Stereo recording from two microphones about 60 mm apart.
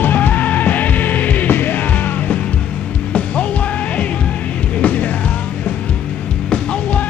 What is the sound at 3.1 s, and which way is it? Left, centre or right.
Music, centre.